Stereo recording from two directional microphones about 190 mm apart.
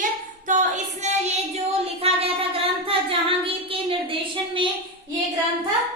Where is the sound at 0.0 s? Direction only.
40° right (ahead or behind).